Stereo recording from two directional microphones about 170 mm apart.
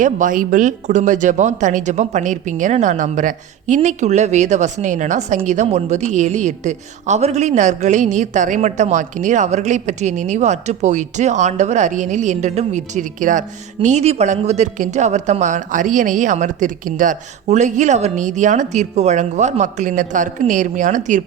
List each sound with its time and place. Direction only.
0.0 s a woman's voice: 50° right (ahead or behind)